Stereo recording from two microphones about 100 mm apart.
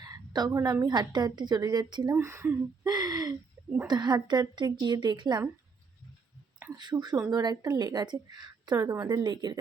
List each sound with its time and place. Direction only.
0.0 s a woman's voice: 40° right (ahead or behind)
2.1 s speech: 25° right (ahead or behind)
2.8 s a sound: 40° right (ahead or behind)
3.8 s a woman's voice: 45° right (ahead or behind)
6.7 s a woman's voice: 45° right (ahead or behind)
7.8 s a woman's voice: 45° right (ahead or behind)